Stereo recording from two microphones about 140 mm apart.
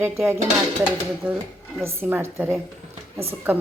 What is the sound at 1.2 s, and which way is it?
Speech, 10° right (ahead or behind).